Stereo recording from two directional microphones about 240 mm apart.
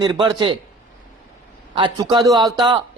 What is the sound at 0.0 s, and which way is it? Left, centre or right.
Speech, centre.